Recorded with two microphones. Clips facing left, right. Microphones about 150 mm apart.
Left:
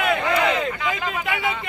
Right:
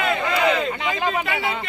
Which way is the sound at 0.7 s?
20° right (ahead or behind).